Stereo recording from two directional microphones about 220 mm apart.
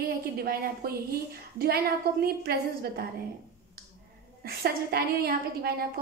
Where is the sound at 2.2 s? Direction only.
45° right (ahead or behind).